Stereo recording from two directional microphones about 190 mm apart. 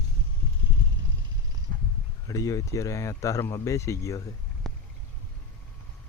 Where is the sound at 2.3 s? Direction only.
15° left (ahead or behind).